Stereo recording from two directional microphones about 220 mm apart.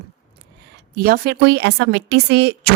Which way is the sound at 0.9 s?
40° right (ahead or behind).